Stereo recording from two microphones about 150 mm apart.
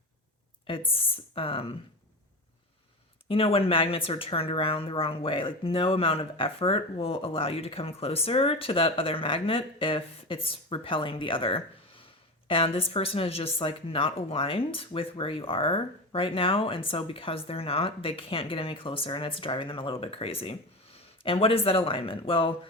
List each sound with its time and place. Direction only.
0.9 s speech: 40° left (ahead or behind)
3.2 s speech: 40° left (ahead or behind)